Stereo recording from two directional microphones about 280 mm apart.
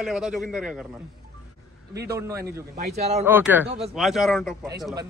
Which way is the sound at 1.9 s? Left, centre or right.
Right.